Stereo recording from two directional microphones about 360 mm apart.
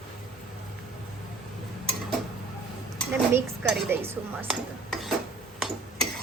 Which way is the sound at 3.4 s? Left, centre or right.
Centre.